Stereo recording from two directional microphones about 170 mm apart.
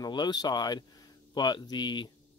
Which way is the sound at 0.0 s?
25° left (ahead or behind).